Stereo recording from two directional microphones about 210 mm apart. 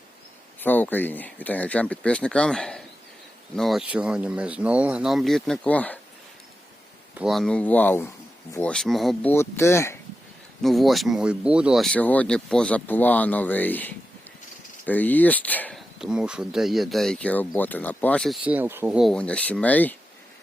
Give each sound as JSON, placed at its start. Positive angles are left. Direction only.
{"t": 0.6, "sound": "speech", "side_deg": 10}
{"t": 7.1, "sound": "speech", "side_deg": -5}
{"t": 9.3, "sound": "speech", "side_deg": 10}
{"t": 10.6, "sound": "speech", "side_deg": 0}
{"t": 16.0, "sound": "speech", "side_deg": -5}
{"t": 18.4, "sound": "speech", "side_deg": -10}